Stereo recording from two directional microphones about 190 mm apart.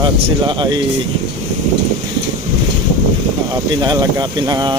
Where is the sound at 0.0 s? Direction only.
25° right (ahead or behind).